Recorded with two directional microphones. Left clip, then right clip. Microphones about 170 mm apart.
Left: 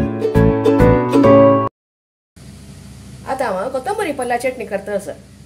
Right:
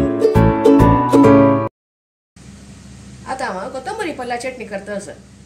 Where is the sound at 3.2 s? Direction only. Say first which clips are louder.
Left 4 dB; 35° left (ahead or behind).